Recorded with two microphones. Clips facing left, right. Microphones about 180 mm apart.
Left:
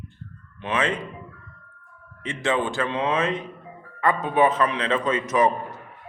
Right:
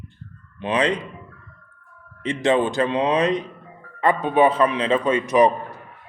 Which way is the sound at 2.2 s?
20° right (ahead or behind).